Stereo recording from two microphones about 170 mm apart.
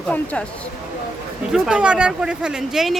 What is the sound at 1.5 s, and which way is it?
Speech, 5° right (ahead or behind).